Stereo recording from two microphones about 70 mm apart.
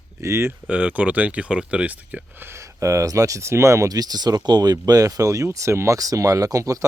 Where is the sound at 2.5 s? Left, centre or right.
Right.